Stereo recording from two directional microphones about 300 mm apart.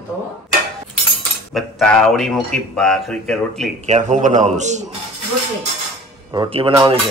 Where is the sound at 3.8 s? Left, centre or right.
Right.